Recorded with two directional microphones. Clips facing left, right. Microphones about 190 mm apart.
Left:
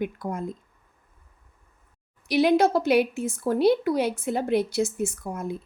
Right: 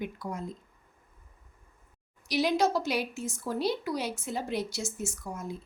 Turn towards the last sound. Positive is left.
turn(degrees=60)  # may be behind; listen again after turning